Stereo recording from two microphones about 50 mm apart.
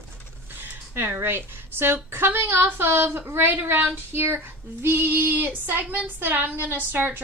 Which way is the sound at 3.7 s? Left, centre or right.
Right.